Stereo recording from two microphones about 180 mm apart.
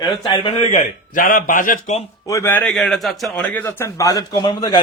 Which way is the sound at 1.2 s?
50° left (ahead or behind).